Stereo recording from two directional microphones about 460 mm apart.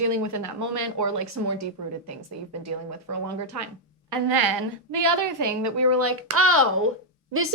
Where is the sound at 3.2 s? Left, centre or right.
Right.